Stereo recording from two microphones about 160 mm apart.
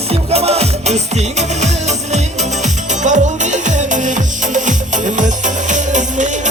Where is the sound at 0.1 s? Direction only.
40° right (ahead or behind).